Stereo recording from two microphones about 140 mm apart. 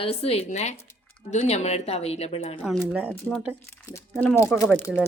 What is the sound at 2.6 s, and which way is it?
Speech, centre (ahead or behind).